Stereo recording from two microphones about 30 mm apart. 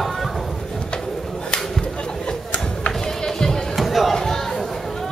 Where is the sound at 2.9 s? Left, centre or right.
Centre.